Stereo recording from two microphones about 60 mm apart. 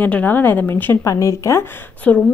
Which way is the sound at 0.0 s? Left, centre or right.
Left.